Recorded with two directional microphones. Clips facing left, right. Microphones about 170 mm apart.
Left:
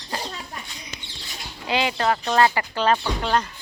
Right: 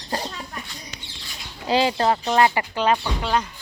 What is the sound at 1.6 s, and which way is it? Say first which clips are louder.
Speech: right 3 dB; 35° right (ahead or behind).